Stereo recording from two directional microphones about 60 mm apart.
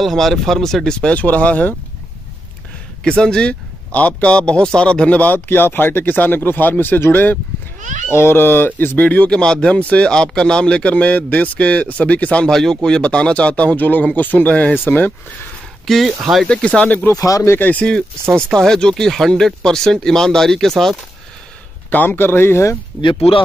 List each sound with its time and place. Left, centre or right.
0.0 s speech: centre; by 1.8 s left
3.0 s speech: centre
9.4 s speech: centre
12.4 s speech: centre; by 15.1 s left
16.2 s speech: centre
16.4 s speech: centre
17.4 s speech: left
18.5 s speech: centre
21.9 s speech: left